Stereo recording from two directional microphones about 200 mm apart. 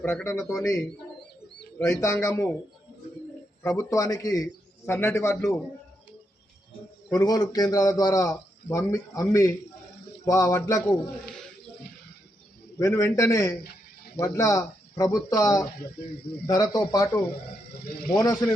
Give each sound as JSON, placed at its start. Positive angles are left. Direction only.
{"t": 0.0, "sound": "speech", "side_deg": 10}
{"t": 2.0, "sound": "speech", "side_deg": 15}
{"t": 3.6, "sound": "speech", "side_deg": 15}
{"t": 7.1, "sound": "a man's voice", "side_deg": 20}
{"t": 10.2, "sound": "speech", "side_deg": 15}
{"t": 11.3, "sound": "a sound", "side_deg": 5}
{"t": 12.8, "sound": "a man's voice", "side_deg": 15}